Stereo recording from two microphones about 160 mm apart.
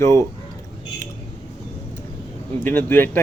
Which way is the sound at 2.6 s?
10° left (ahead or behind).